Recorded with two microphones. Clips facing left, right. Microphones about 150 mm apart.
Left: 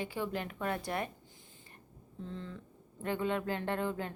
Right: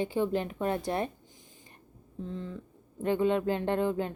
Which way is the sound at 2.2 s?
15° right (ahead or behind).